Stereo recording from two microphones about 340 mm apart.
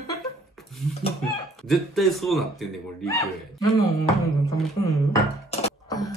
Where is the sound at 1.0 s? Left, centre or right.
Centre.